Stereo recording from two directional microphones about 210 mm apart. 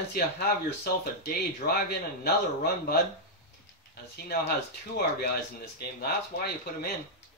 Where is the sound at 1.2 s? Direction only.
50° left (ahead or behind).